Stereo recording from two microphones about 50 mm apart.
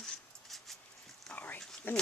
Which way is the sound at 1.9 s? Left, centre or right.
Left.